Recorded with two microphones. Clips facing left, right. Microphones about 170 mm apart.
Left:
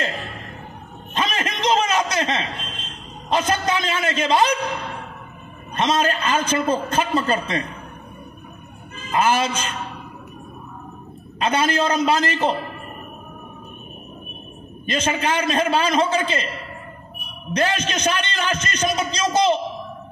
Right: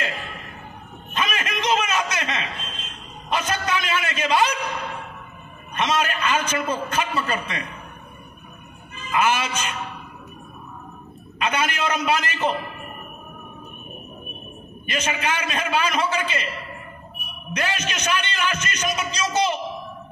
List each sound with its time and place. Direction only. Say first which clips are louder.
1.1 s a sound: left 2 dB; 35° left (ahead or behind)
3.3 s a man's voice: left 4 dB; 35° left (ahead or behind)
5.8 s a man's voice: left 3 dB; 35° left (ahead or behind)
8.9 s a man's voice: left 2 dB; 35° left (ahead or behind)
11.3 s a man's voice: left 5 dB; 35° left (ahead or behind)
14.9 s a man's voice: left 4 dB; 35° left (ahead or behind)
17.5 s a man's voice: left 5 dB; 35° left (ahead or behind)